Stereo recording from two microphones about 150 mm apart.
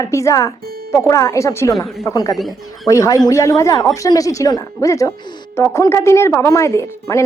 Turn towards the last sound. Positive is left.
turn(degrees=20)  # may be behind; listen again after turning